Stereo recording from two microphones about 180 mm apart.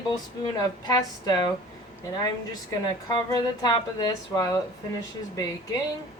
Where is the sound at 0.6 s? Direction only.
20° left (ahead or behind).